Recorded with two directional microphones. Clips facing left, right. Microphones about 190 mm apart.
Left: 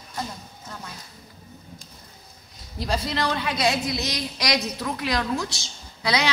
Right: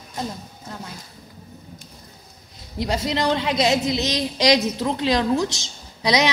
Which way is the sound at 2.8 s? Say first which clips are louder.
Right 4 dB; 20° right (ahead or behind).